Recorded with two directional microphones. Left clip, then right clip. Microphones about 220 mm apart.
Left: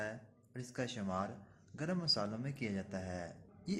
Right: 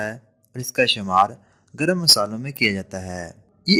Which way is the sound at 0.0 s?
45° right (ahead or behind).